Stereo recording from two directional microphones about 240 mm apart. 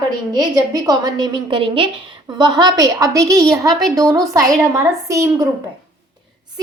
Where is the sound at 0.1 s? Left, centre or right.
Centre.